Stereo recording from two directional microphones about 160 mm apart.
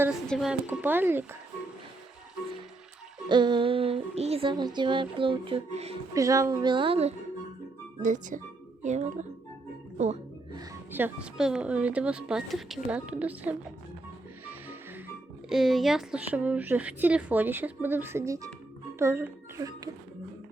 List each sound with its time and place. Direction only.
0.3 s speech: centre (ahead or behind)
3.2 s a sound: 30° right (ahead or behind)
6.1 s a woman's voice: 20° right (ahead or behind)
8.0 s speech: 50° right (ahead or behind)
10.5 s music: 25° right (ahead or behind)
10.9 s speech: 10° right (ahead or behind)
14.4 s music: 10° right (ahead or behind)
15.4 s a woman's voice: centre (ahead or behind); by 19.9 s 20° right (ahead or behind)